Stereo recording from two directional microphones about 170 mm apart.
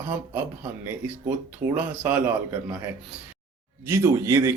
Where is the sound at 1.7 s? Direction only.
10° right (ahead or behind).